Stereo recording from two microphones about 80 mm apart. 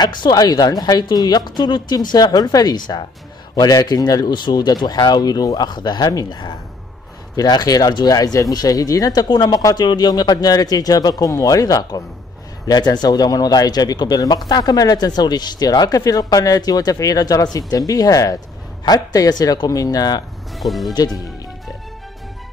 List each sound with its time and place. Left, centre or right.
0.0 s speech: left
20.5 s speech: centre
20.9 s speech: left